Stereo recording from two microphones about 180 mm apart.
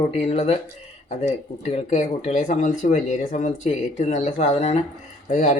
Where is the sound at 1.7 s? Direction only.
40° left (ahead or behind).